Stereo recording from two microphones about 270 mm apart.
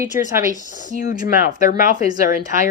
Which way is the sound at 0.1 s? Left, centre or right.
Left.